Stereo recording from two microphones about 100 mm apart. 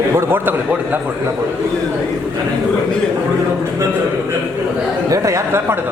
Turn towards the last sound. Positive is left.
turn(degrees=-30)  # may be behind; listen again after turning